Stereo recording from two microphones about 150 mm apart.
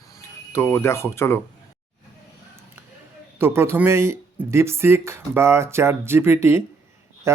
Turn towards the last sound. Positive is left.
turn(degrees=-15)  # may be behind; listen again after turning